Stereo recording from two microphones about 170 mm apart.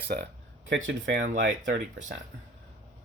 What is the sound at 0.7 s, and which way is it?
Speech, 90° right.